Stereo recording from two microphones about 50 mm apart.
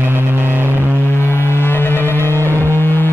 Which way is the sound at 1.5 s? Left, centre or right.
Left.